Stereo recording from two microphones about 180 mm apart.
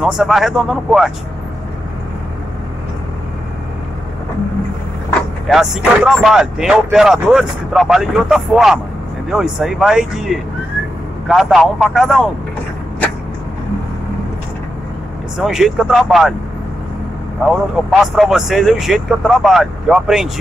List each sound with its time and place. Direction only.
0.0 s speech: centre (ahead or behind)
5.5 s speech: centre (ahead or behind)
15.3 s speech: centre (ahead or behind)
17.5 s speech: centre (ahead or behind)